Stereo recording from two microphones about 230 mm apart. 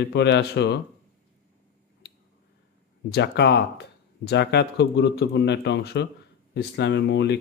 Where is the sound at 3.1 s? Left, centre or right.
Left.